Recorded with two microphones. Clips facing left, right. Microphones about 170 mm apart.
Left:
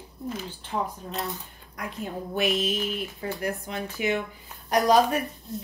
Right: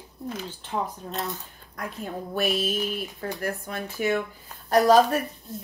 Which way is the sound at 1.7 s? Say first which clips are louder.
Even; 15° left (ahead or behind).